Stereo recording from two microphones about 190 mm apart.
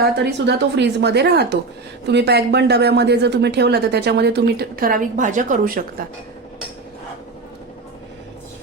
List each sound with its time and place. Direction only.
0.2 s speech: 65° right (ahead or behind); by 5.8 s 45° right (ahead or behind)